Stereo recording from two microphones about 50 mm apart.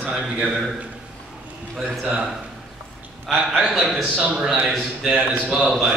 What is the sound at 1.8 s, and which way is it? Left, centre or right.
Speech, centre.